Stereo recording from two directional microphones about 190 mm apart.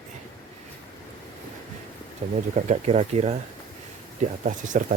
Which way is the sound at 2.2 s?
30° right (ahead or behind).